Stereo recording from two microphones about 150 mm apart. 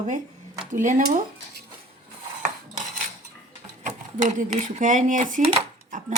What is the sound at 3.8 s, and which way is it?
Speech, 60° right (ahead or behind).